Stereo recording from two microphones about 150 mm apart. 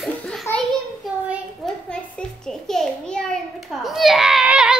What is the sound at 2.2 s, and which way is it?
A child's voice, 5° left (ahead or behind).